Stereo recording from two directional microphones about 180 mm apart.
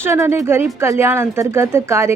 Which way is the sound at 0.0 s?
15° right (ahead or behind).